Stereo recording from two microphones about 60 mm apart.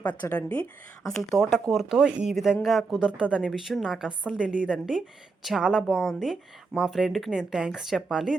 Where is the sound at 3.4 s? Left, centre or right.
Centre.